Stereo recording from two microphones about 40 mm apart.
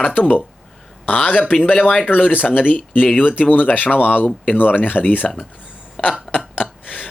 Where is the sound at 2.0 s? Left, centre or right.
Left.